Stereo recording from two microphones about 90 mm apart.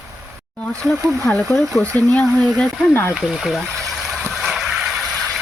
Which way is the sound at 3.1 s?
5° right (ahead or behind).